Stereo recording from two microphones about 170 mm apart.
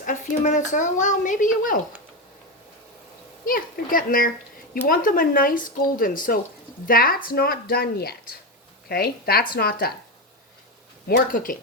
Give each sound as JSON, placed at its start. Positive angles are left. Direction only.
{"t": 0.0, "sound": "speech", "side_deg": 50}
{"t": 3.4, "sound": "speech", "side_deg": 55}
{"t": 11.3, "sound": "speech", "side_deg": 55}